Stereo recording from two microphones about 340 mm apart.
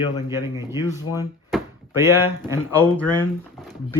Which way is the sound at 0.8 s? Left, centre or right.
Centre.